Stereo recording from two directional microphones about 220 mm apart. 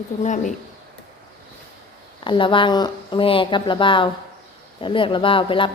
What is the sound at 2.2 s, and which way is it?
Speech, 20° left (ahead or behind).